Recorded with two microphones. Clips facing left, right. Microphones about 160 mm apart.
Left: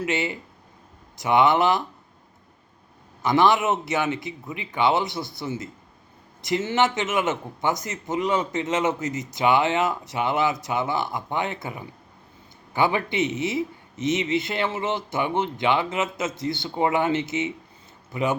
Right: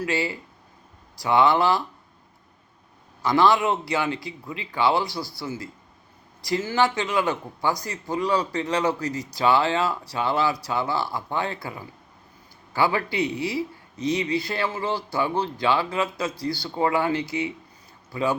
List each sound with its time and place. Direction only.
0.0 s speech: 20° left (ahead or behind)
3.2 s speech: 20° left (ahead or behind)